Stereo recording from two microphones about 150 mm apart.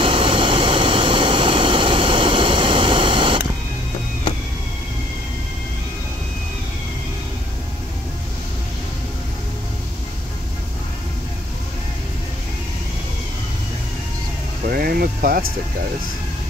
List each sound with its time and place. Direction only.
0.0 s vehicle: 35° right (ahead or behind)
14.7 s music: 85° right